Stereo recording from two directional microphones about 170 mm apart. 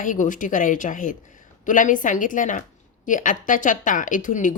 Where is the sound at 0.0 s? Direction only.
50° left (ahead or behind).